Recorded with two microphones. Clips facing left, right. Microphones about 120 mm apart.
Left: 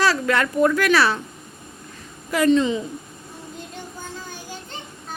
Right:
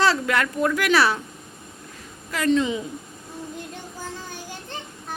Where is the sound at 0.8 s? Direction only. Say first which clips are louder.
Left 1 dB; 15° right (ahead or behind).